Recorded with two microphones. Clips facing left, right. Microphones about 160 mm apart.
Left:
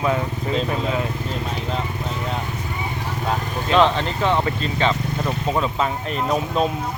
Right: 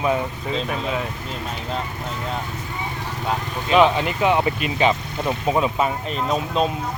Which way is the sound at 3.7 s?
10° right (ahead or behind).